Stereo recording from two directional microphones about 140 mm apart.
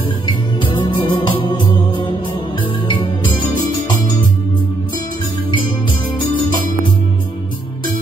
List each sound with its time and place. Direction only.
0.6 s music: 35° left (ahead or behind)